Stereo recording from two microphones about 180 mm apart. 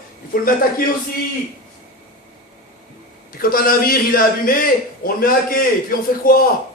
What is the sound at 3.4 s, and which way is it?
A man's voice, 55° left (ahead or behind).